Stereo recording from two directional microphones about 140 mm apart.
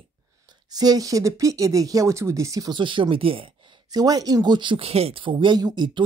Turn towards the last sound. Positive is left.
turn(degrees=-35)  # may be behind; listen again after turning